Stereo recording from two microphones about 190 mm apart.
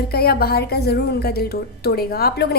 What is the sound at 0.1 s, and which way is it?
A woman's voice, 55° left (ahead or behind).